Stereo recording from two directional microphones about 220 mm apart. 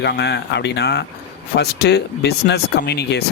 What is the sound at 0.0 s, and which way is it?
Speech, 50° left (ahead or behind).